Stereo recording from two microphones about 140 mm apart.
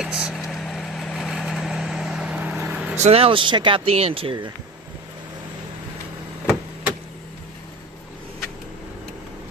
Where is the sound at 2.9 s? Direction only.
50° right (ahead or behind).